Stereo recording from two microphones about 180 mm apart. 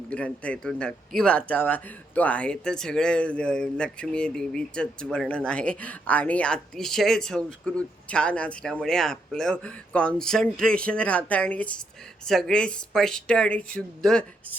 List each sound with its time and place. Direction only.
0.1 s speech: 5° left (ahead or behind)